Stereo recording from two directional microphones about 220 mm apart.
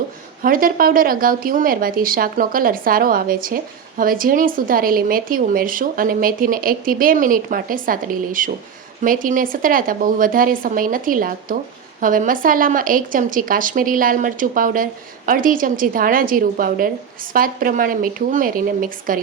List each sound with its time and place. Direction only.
0.4 s a woman's voice: 40° right (ahead or behind)